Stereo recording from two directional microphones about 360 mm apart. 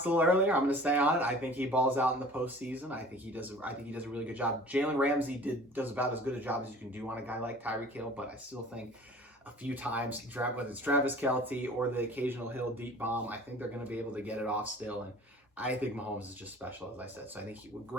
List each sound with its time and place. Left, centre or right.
0.0 s speech: centre
9.6 s speech: centre